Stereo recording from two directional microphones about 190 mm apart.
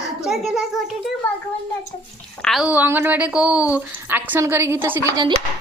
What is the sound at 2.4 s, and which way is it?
A woman's voice, centre (ahead or behind).